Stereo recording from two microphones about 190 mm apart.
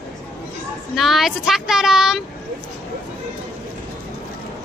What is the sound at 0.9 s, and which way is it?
Speech, centre (ahead or behind).